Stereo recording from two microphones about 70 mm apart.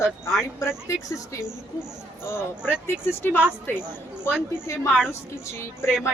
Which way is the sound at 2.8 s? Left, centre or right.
Left.